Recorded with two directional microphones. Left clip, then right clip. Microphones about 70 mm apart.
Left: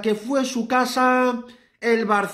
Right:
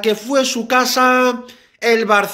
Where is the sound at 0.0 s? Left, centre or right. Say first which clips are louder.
Right 6 dB; left.